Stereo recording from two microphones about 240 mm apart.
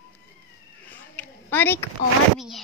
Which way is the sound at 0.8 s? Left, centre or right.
Centre.